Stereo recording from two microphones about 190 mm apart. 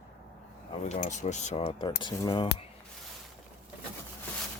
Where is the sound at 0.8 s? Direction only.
40° left (ahead or behind).